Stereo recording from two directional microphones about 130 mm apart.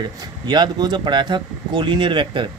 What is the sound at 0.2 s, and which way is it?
Speech, 35° right (ahead or behind).